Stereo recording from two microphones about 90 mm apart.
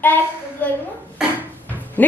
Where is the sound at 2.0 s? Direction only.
20° left (ahead or behind).